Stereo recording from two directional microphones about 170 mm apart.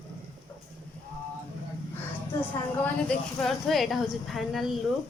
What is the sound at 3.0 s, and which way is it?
A woman's voice, centre (ahead or behind).